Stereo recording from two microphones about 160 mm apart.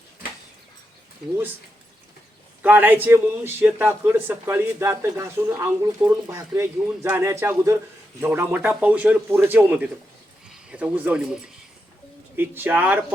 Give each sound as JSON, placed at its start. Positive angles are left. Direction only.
{"t": 2.6, "sound": "a man's voice", "side_deg": -10}